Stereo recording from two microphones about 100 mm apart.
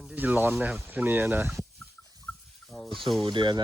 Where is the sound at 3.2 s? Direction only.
50° right (ahead or behind).